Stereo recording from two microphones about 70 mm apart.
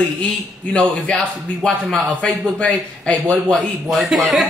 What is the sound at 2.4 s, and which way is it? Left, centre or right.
Speech, centre.